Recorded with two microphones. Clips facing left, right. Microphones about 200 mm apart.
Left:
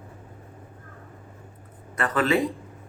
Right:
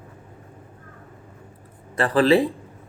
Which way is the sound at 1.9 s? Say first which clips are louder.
Right 6 dB; 30° right (ahead or behind).